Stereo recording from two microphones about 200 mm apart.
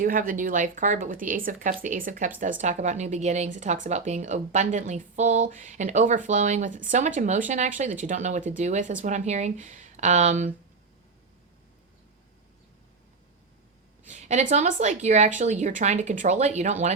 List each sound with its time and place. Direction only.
0.0 s a woman's voice: 45° right (ahead or behind)
14.1 s a woman's voice: 35° right (ahead or behind)